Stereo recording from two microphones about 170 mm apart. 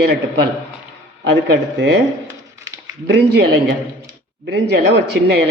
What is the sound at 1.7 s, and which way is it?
Speech, 90° right.